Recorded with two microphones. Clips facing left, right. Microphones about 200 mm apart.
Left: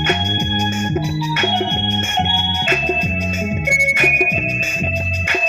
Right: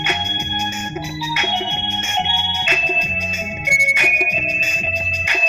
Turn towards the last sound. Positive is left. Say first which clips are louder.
# left 5 dB
turn(degrees=50)  # may be behind; listen again after turning